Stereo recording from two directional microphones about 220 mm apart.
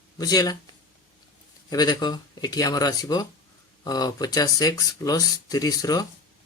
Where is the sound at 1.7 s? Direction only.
20° left (ahead or behind).